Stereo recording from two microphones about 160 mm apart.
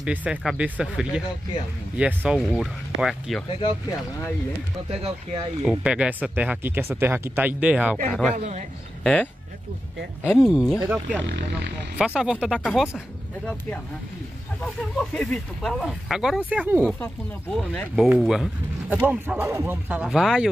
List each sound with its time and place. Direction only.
0.0 s speech: 10° right (ahead or behind)
5.6 s speech: 5° right (ahead or behind)
8.1 s speech: 5° left (ahead or behind)
8.4 s a man's voice: 45° right (ahead or behind)
9.0 s speech: 5° left (ahead or behind)
11.2 s speech: 90° right
12.0 s speech: 5° right (ahead or behind)
12.5 s speech: 5° left (ahead or behind)
14.6 s speech: 5° left (ahead or behind)
17.0 s speech: 5° left (ahead or behind)